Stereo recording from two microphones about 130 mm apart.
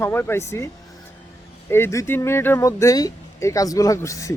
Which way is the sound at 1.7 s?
20° left (ahead or behind).